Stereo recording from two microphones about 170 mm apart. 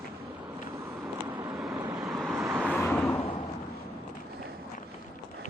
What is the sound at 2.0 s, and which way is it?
Vehicle, centre (ahead or behind).